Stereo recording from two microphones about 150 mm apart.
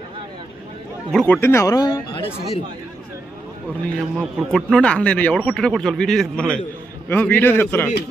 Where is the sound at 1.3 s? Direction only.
15° left (ahead or behind).